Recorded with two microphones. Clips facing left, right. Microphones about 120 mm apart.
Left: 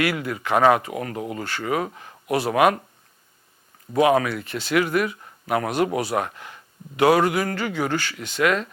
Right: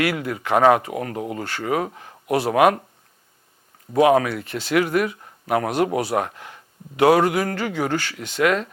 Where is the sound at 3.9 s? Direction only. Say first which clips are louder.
Right 2 dB; 45° right (ahead or behind).